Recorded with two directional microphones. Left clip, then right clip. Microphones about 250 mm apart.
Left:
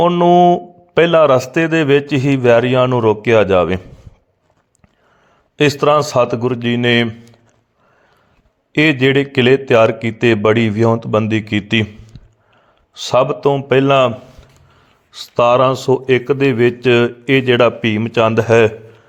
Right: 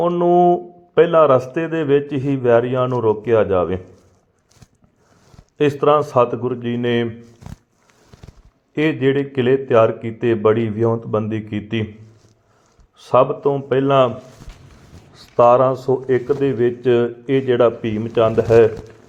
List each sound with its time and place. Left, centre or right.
0.0 s speech: left
5.5 s speech: left
8.7 s speech: left
12.9 s speech: left
15.1 s speech: left